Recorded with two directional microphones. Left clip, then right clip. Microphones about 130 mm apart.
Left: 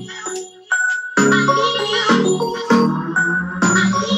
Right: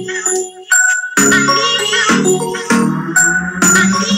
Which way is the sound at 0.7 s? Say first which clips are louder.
Right 5 dB; 30° right (ahead or behind).